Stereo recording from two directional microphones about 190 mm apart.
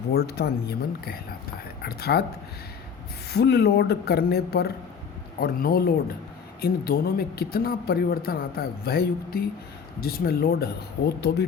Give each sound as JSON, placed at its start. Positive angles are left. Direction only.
{"t": 0.1, "sound": "speech", "side_deg": 55}
{"t": 3.2, "sound": "speech", "side_deg": 60}